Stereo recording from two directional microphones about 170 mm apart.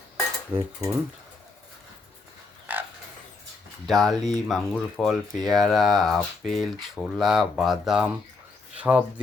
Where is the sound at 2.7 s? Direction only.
10° right (ahead or behind).